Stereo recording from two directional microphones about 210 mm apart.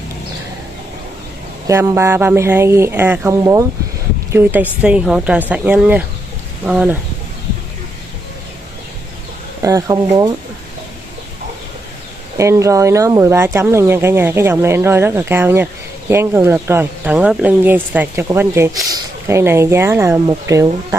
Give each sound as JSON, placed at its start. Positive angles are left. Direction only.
{"t": 1.7, "sound": "speech", "side_deg": -15}
{"t": 9.6, "sound": "speech", "side_deg": -15}
{"t": 12.4, "sound": "speech", "side_deg": -15}